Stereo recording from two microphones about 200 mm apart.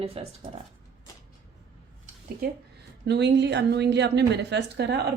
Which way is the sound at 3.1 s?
55° right (ahead or behind).